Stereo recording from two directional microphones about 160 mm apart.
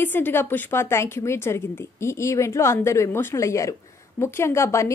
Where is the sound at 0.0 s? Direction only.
10° left (ahead or behind).